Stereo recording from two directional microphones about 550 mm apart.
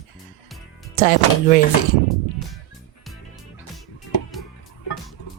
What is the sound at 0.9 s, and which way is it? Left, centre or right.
Speech, centre.